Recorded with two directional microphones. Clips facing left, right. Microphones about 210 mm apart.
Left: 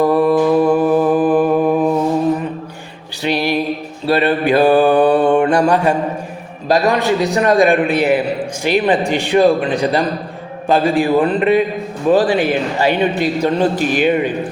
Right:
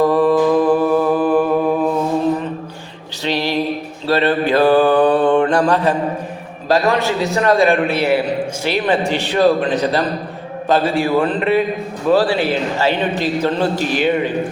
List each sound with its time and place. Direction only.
0.0 s mantra: 10° left (ahead or behind)
3.2 s music: 15° left (ahead or behind)
4.0 s mantra: 15° left (ahead or behind)
6.7 s a man's voice: 15° left (ahead or behind)